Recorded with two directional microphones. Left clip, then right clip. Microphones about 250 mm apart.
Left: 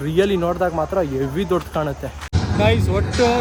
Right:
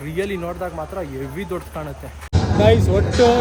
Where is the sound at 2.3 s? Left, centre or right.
Centre.